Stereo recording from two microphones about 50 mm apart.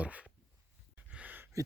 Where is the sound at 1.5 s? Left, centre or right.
Right.